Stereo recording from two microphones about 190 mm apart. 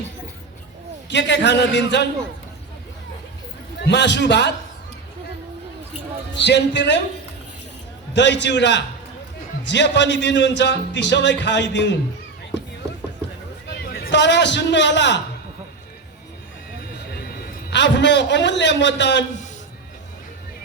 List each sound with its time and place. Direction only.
1.1 s speech: 65° left (ahead or behind)
3.8 s a man's voice: 65° left (ahead or behind)
6.3 s a man's voice: 65° left (ahead or behind)
8.1 s speech: 65° left (ahead or behind)
13.9 s speech: 60° left (ahead or behind)
17.2 s a man's voice: 60° left (ahead or behind)